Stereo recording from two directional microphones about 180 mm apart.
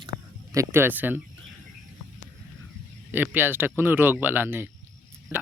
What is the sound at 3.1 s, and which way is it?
A man's voice, 10° right (ahead or behind).